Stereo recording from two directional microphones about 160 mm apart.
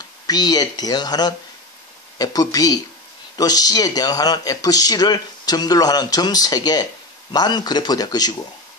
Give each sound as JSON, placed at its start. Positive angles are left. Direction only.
{"t": 0.3, "sound": "speech", "side_deg": 25}